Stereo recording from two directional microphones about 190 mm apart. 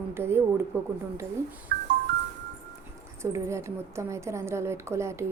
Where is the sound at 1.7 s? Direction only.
55° right (ahead or behind).